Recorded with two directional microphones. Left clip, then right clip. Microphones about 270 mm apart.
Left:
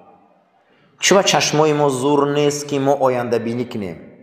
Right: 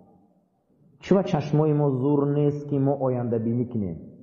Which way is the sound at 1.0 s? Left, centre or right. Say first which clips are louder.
Left 10 dB; centre.